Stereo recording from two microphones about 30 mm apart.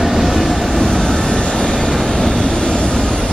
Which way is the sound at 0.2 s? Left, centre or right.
Centre.